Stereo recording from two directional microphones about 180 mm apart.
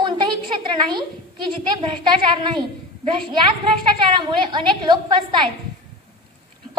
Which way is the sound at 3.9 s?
25° right (ahead or behind).